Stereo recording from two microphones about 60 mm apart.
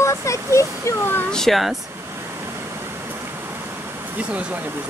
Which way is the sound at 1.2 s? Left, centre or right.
Centre.